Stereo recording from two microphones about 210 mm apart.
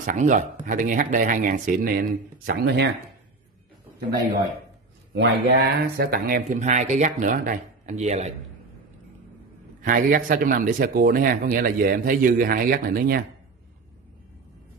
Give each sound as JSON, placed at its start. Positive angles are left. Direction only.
{"t": 0.0, "sound": "speech", "side_deg": -40}
{"t": 5.1, "sound": "speech", "side_deg": -55}
{"t": 9.8, "sound": "speech", "side_deg": -40}